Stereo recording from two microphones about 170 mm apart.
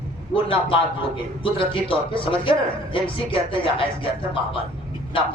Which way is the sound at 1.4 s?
30° left (ahead or behind).